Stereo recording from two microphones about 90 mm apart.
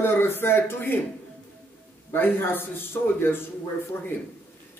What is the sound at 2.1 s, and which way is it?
Speech, 20° left (ahead or behind).